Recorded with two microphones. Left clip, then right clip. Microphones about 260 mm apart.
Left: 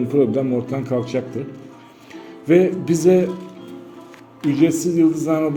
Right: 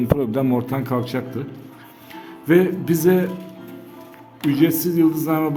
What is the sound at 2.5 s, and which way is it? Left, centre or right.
Speech, centre.